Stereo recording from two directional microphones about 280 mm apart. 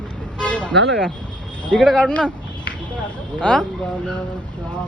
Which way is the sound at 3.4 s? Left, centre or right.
Centre.